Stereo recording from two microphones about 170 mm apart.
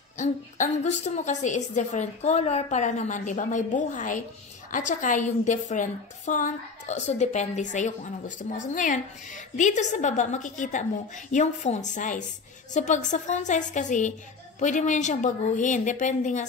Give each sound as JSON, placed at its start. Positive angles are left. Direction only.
{"t": 0.2, "sound": "a woman's voice", "side_deg": 45}